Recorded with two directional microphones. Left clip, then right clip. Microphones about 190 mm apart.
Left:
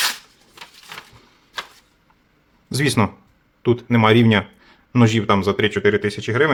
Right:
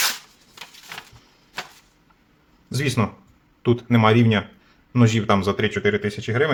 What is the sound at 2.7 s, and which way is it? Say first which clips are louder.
Speech: left 5 dB; 25° left (ahead or behind).